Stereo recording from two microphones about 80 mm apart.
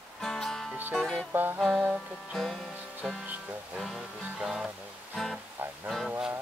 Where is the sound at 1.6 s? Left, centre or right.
Centre.